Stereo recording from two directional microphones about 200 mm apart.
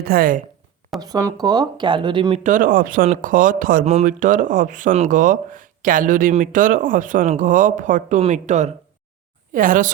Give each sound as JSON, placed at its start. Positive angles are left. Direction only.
{"t": 0.0, "sound": "speech", "side_deg": -45}
{"t": 0.9, "sound": "speech", "side_deg": -20}
{"t": 2.4, "sound": "speech", "side_deg": -40}